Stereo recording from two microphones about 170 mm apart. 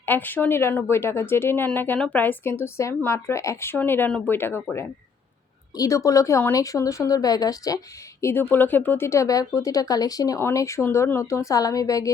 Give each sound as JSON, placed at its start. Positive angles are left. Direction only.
{"t": 0.0, "sound": "a woman's voice", "side_deg": 10}